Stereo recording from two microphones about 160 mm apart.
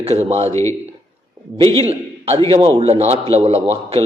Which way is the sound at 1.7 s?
35° right (ahead or behind).